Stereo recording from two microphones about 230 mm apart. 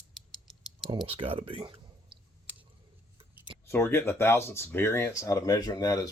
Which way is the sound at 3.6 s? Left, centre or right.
Centre.